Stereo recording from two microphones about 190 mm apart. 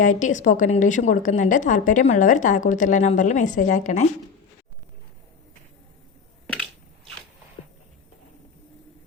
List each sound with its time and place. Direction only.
0.0 s a woman's voice: 40° left (ahead or behind)